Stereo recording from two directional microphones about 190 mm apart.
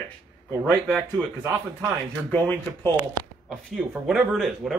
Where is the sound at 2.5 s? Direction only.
20° right (ahead or behind).